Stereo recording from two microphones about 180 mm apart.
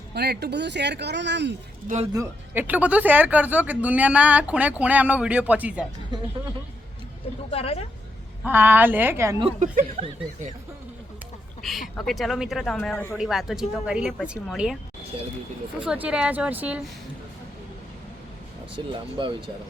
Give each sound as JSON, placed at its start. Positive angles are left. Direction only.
{"t": 0.1, "sound": "speech", "side_deg": -65}
{"t": 2.1, "sound": "speech", "side_deg": -15}
{"t": 7.5, "sound": "speech", "side_deg": 35}
{"t": 8.4, "sound": "speech", "side_deg": -10}
{"t": 9.6, "sound": "speech", "side_deg": -40}
{"t": 11.9, "sound": "speech", "side_deg": 0}
{"t": 15.8, "sound": "speech", "side_deg": -5}
{"t": 18.8, "sound": "speech", "side_deg": -25}